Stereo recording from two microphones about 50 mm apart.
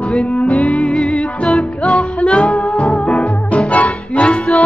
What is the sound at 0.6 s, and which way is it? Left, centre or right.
Music, centre.